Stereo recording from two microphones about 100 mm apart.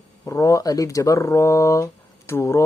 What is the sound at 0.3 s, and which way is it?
Speech, 30° left (ahead or behind).